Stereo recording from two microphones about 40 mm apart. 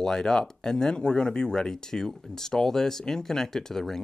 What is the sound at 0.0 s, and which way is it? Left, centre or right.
Speech, centre.